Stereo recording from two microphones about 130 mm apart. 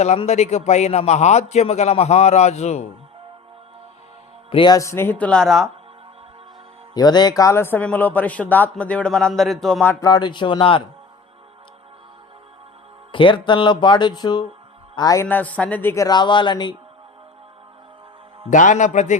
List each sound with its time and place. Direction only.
0.0 s a man's voice: 60° left (ahead or behind)
4.5 s speech: 35° left (ahead or behind)
4.8 s speech: 20° left (ahead or behind); by 5.6 s 5° left (ahead or behind)
6.9 s speech: 30° left (ahead or behind); by 9.8 s centre (ahead or behind)
10.0 s speech: 30° left (ahead or behind)
13.1 s a man's voice: 40° left (ahead or behind)
15.3 s speech: 10° left (ahead or behind)
16.0 s speech: 35° left (ahead or behind)
18.5 s a man's voice: 70° left (ahead or behind)